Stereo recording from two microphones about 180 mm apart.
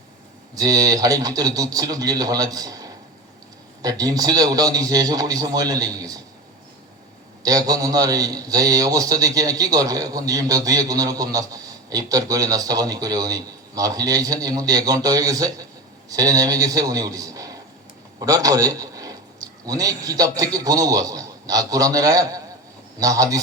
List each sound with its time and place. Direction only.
0.5 s a man's voice: 20° right (ahead or behind)
7.4 s a man's voice: 20° right (ahead or behind)